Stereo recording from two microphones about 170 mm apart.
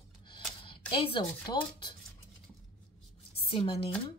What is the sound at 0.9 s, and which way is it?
Speech, 30° left (ahead or behind).